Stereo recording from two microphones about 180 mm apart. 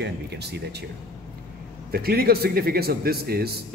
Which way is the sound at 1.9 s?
60° right (ahead or behind).